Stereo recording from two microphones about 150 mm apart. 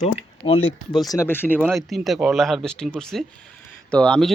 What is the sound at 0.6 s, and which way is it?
Speech, centre (ahead or behind).